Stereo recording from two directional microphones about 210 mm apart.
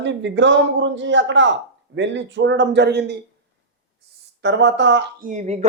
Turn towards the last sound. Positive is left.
turn(degrees=-35)  # may be behind; listen again after turning